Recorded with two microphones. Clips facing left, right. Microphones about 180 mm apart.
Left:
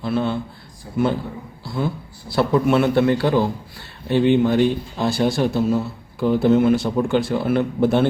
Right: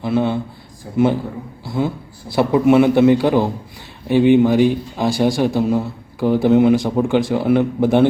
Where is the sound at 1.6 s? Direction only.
15° right (ahead or behind).